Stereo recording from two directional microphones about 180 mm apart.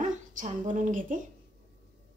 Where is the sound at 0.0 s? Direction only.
45° right (ahead or behind).